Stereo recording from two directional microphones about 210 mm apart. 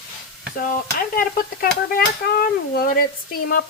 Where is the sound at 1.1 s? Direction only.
40° left (ahead or behind).